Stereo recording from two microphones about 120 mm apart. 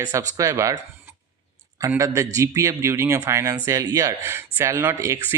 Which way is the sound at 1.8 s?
25° right (ahead or behind).